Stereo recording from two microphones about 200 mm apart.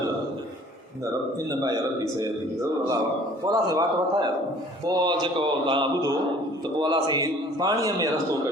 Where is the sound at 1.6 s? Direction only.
20° right (ahead or behind).